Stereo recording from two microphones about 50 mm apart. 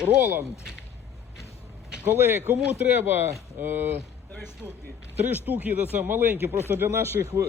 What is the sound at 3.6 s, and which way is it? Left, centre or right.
Speech, right.